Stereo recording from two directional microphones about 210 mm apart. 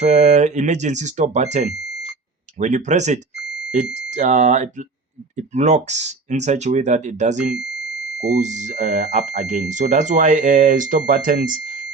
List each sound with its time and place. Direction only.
0.0 s speech: 30° right (ahead or behind)
8.4 s speech: 35° right (ahead or behind)